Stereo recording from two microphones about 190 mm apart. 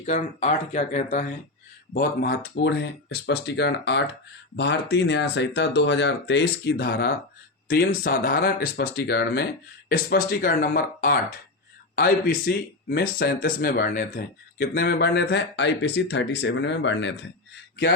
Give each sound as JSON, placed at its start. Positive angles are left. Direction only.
{"t": 0.0, "sound": "speech", "side_deg": 35}
{"t": 1.9, "sound": "speech", "side_deg": 55}